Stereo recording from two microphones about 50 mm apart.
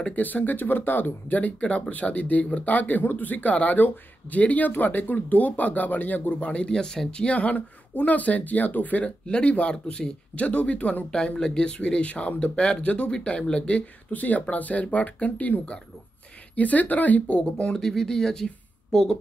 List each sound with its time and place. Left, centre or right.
0.0 s speech: left
6.8 s speech: centre; by 9.1 s left
9.2 s speech: left
11.1 s speech: centre
17.7 s speech: centre